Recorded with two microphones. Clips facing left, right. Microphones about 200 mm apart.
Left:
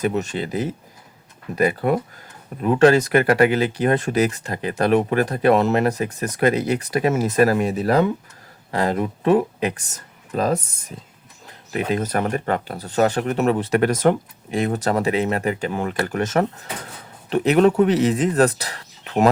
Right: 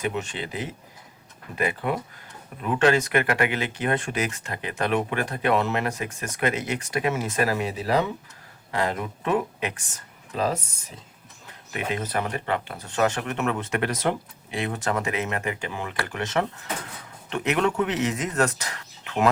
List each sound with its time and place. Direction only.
0.0 s speech: 40° left (ahead or behind)
8.7 s speech: 35° left (ahead or behind)
11.9 s speech: 40° left (ahead or behind)